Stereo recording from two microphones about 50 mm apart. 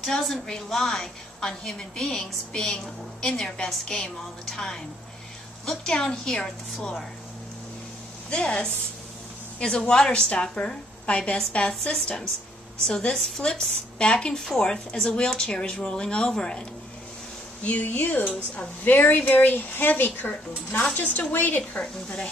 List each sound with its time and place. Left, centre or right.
0.0 s a woman's voice: centre
5.9 s a woman's voice: centre
8.3 s a woman's voice: centre
11.9 s a woman's voice: centre
17.6 s speech: left
22.0 s a woman's voice: left